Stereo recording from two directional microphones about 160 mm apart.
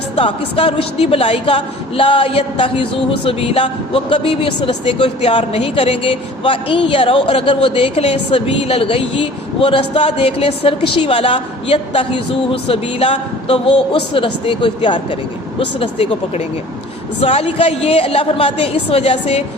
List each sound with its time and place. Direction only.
0.2 s a woman's voice: 35° left (ahead or behind)
17.2 s a woman's voice: 40° left (ahead or behind)